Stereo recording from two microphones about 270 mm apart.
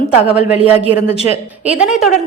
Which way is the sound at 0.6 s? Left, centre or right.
Left.